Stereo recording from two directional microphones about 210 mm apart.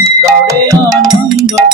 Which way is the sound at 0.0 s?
15° right (ahead or behind).